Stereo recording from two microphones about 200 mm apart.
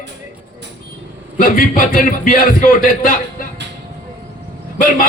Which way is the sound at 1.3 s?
45° left (ahead or behind).